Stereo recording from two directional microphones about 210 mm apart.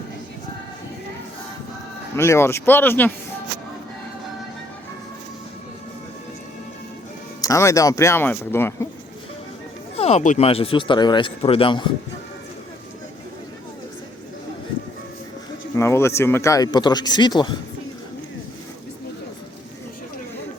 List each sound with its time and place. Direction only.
2.1 s speech: 15° left (ahead or behind)
7.4 s speech: 15° left (ahead or behind)
10.0 s speech: 30° left (ahead or behind)
15.7 s speech: 15° left (ahead or behind)